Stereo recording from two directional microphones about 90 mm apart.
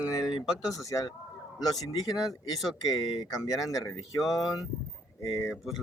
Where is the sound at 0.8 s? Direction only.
40° left (ahead or behind).